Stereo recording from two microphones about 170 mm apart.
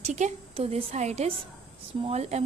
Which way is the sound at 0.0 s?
40° right (ahead or behind).